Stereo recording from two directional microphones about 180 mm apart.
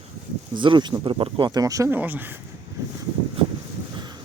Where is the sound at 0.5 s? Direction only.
25° right (ahead or behind); by 2.4 s 10° right (ahead or behind).